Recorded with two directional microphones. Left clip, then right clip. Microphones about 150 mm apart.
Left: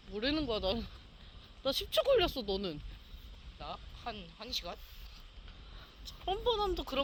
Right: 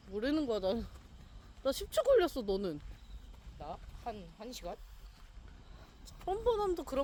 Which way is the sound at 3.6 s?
60° right (ahead or behind).